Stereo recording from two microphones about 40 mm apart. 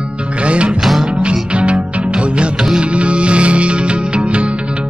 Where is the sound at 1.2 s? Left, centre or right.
Right.